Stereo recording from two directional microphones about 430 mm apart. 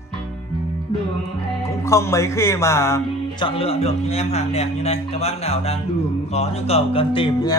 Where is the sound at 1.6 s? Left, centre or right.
Centre.